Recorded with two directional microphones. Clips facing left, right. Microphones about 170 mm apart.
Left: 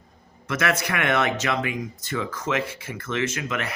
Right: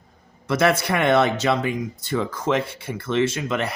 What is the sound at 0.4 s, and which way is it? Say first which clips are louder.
Speech: right 5 dB; 30° right (ahead or behind).